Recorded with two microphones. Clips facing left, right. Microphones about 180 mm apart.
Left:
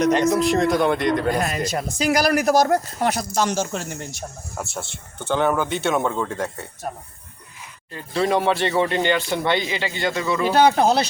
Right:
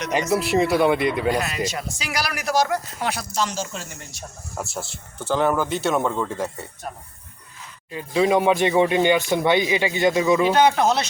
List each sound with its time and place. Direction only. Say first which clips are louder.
0.1 s speech: left 3 dB; 5° right (ahead or behind)
1.3 s speech: left 1 dB; 50° left (ahead or behind)
4.7 s speech: even; 5° right (ahead or behind)
7.9 s speech: right 2 dB; 10° right (ahead or behind)
10.5 s speech: left 1 dB; 35° left (ahead or behind)